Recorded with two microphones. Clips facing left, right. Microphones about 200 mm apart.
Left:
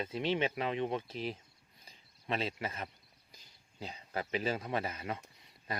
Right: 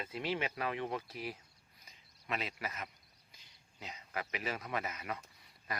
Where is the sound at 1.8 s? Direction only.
30° left (ahead or behind).